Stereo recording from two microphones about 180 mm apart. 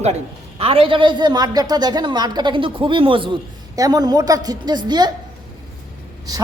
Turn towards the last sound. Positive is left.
turn(degrees=-20)  # may be behind; listen again after turning